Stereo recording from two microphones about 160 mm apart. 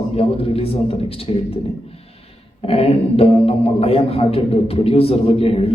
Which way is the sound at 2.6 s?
40° left (ahead or behind).